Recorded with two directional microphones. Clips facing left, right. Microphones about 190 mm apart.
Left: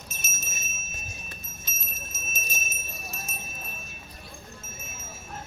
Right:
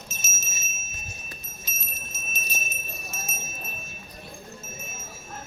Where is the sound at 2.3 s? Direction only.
45° left (ahead or behind).